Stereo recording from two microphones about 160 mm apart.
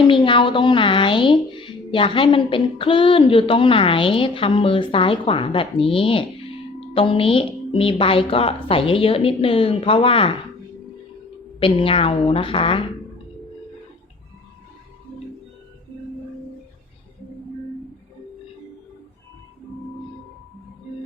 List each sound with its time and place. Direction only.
0.1 s a woman's voice: 30° left (ahead or behind)
11.6 s a woman's voice: 35° left (ahead or behind)